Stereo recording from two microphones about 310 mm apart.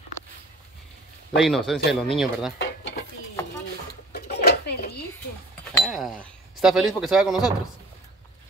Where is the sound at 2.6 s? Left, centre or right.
Left.